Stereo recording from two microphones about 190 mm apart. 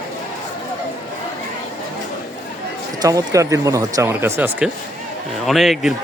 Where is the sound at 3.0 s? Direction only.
15° right (ahead or behind).